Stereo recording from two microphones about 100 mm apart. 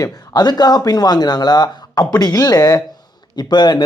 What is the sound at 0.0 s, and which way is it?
Speech, 45° left (ahead or behind).